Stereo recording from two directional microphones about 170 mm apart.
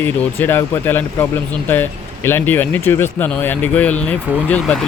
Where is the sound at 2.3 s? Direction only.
10° left (ahead or behind).